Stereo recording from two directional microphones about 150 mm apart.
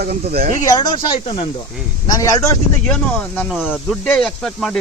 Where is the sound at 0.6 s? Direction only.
25° left (ahead or behind).